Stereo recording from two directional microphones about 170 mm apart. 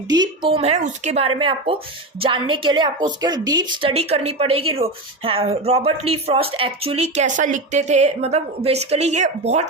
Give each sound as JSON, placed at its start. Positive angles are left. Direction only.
{"t": 0.1, "sound": "a woman's voice", "side_deg": -25}